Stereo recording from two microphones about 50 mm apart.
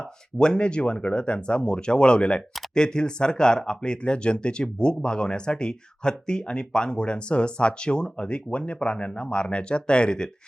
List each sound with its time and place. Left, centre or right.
0.3 s speech: centre